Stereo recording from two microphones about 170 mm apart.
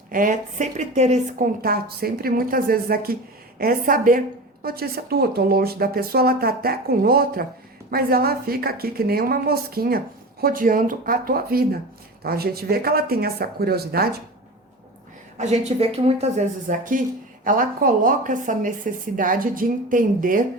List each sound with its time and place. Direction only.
0.1 s a woman's voice: 50° right (ahead or behind)
1.6 s speech: 65° right (ahead or behind)
15.4 s a woman's voice: 40° right (ahead or behind)